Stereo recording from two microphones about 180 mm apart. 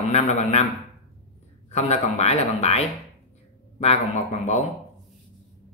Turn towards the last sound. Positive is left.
turn(degrees=40)  # may be behind; listen again after turning